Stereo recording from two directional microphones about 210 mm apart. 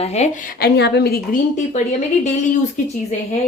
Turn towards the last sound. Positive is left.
turn(degrees=35)  # may be behind; listen again after turning